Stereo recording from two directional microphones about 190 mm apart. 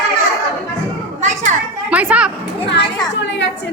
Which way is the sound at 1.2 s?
40° right (ahead or behind).